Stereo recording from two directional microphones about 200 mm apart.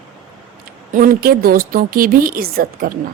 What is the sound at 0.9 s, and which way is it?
A woman's voice, 45° right (ahead or behind).